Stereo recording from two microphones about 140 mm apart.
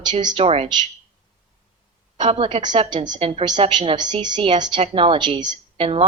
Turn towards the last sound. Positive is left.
turn(degrees=-35)  # may be behind; listen again after turning